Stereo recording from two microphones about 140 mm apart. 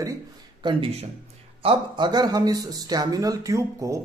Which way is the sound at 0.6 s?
35° right (ahead or behind).